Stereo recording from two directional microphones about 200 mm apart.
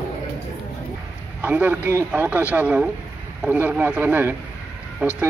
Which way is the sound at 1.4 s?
10° right (ahead or behind).